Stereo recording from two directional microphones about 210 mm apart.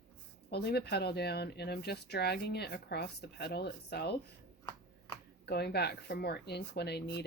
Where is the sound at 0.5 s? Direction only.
50° left (ahead or behind).